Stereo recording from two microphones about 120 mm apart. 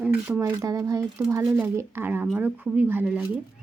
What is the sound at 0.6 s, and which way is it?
Speech, 25° right (ahead or behind).